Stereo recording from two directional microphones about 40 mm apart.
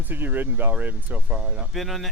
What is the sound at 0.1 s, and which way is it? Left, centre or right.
Speech, right.